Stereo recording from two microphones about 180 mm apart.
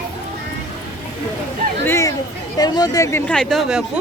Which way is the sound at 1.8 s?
15° left (ahead or behind).